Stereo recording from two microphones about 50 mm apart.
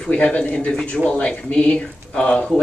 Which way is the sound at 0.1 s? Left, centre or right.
Left.